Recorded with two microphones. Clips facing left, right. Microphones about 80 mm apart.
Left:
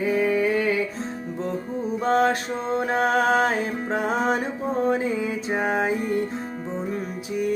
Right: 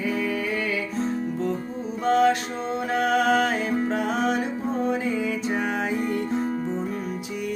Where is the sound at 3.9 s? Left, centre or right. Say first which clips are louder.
Left 1 dB; left.